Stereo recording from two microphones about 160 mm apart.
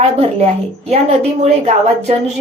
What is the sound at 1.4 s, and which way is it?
Speech, 40° right (ahead or behind).